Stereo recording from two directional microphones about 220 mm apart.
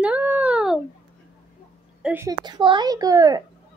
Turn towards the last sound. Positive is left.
turn(degrees=-15)  # may be behind; listen again after turning